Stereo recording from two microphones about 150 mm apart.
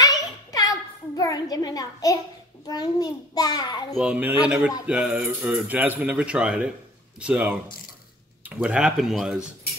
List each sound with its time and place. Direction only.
0.0 s a sound: 25° left (ahead or behind)
2.6 s a child's voice: 25° left (ahead or behind)
3.9 s speech: 10° right (ahead or behind)